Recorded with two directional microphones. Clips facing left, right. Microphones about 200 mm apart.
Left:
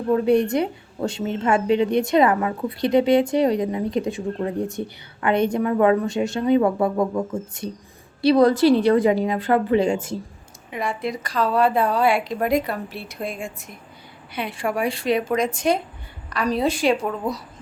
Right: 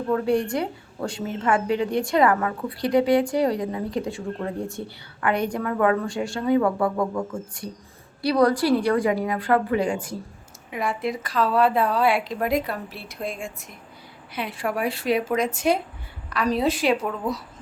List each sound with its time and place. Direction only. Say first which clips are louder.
0.1 s a woman's voice: left 5 dB; 20° left (ahead or behind)
10.7 s a woman's voice: even; centre (ahead or behind)